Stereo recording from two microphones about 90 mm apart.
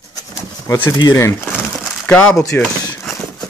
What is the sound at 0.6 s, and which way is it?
Speech, 25° left (ahead or behind).